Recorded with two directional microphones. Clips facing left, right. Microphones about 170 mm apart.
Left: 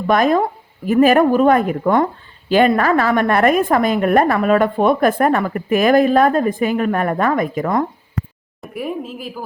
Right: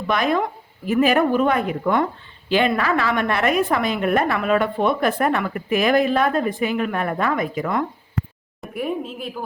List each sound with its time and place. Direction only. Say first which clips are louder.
0.1 s a woman's voice: left 6 dB; 45° left (ahead or behind)
8.6 s a woman's voice: left 1 dB; centre (ahead or behind)